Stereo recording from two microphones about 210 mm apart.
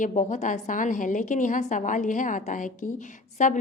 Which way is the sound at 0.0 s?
35° left (ahead or behind).